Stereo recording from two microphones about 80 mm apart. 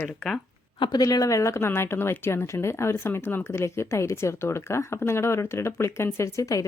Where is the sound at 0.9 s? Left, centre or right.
Left.